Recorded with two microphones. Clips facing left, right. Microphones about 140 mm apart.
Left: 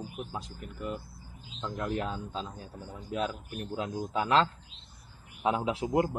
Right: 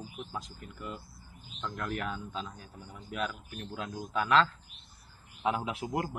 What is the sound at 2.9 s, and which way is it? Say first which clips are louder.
A man's voice: left 3 dB; 40° left (ahead or behind).